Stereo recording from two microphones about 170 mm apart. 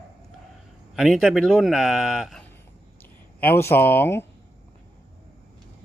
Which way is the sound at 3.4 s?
15° left (ahead or behind).